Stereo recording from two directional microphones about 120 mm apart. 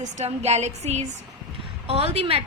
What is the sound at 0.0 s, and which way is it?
A woman's voice, 70° right (ahead or behind).